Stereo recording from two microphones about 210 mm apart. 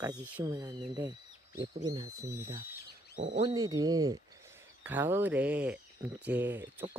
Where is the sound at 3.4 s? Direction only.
20° right (ahead or behind).